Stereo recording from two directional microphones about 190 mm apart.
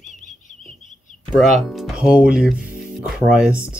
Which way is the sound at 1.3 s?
Centre (ahead or behind).